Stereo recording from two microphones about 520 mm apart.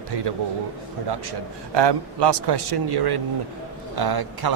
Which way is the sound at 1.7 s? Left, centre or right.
Right.